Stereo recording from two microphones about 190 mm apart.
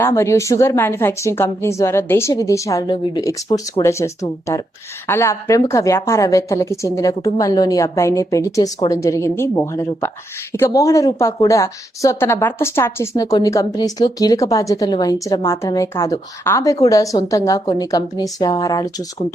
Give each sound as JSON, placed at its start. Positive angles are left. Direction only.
{"t": 0.0, "sound": "a woman's voice", "side_deg": 15}